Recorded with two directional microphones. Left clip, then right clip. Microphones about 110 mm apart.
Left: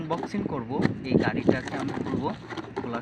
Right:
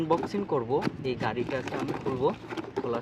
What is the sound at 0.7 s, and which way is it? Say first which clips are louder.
Speech: left 2 dB; 65° right (ahead or behind).